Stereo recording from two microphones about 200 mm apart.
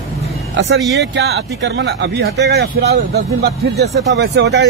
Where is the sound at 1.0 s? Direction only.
60° right (ahead or behind).